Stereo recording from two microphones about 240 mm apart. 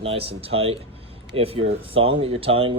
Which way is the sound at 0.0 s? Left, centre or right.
Right.